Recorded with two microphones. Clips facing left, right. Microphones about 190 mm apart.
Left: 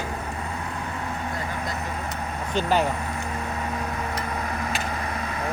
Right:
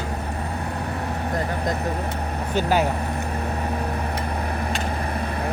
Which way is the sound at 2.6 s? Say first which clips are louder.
Right 2 dB; 5° right (ahead or behind).